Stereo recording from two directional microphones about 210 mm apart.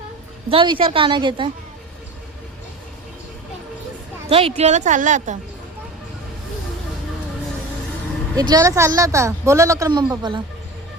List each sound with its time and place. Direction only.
0.4 s a woman's voice: 25° right (ahead or behind)
4.3 s a woman's voice: 30° right (ahead or behind)
8.4 s a woman's voice: 15° right (ahead or behind)